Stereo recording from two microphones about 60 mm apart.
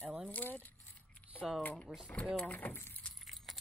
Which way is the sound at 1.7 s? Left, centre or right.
Centre.